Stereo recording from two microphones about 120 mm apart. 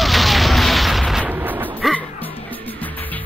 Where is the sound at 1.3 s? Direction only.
15° right (ahead or behind).